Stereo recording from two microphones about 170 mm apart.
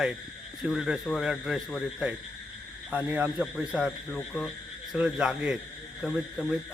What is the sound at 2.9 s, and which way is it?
Speech, 10° right (ahead or behind).